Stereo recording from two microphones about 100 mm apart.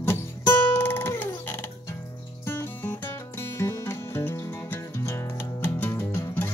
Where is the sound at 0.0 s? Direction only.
25° left (ahead or behind).